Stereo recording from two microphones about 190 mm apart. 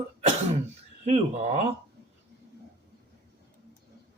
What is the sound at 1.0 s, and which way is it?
Speech, 35° right (ahead or behind).